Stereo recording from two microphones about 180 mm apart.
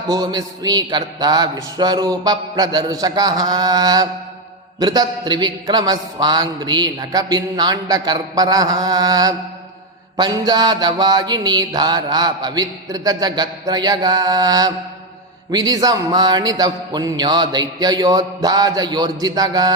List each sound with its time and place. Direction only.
0.1 s a man's voice: 20° right (ahead or behind)